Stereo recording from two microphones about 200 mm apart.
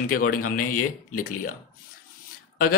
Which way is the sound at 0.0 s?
45° left (ahead or behind).